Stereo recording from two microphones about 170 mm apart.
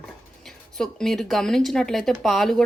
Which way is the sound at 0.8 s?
5° left (ahead or behind).